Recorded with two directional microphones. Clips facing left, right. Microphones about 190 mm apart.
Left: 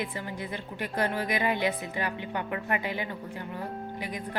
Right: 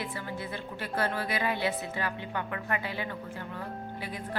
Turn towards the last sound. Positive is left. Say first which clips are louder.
# left 2 dB
turn(degrees=15)  # may be behind; listen again after turning